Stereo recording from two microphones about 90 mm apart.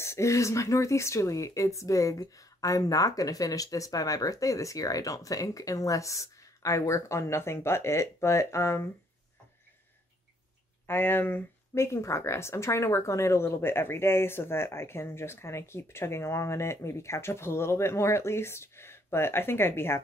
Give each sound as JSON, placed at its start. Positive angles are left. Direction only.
{"t": 0.0, "sound": "speech", "side_deg": 30}
{"t": 10.9, "sound": "speech", "side_deg": 25}